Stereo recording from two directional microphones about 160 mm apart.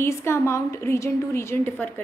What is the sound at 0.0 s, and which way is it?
A woman's voice, 15° left (ahead or behind).